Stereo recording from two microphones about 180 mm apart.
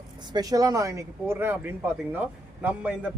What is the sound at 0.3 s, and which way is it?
A man's voice, 20° right (ahead or behind).